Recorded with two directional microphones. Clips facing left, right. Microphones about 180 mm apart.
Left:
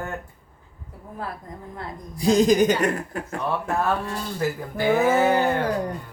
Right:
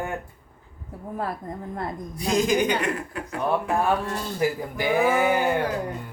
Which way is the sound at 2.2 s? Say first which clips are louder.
Left 5 dB; 35° left (ahead or behind).